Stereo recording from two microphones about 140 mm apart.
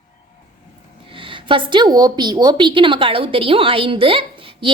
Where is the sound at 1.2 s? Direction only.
35° right (ahead or behind).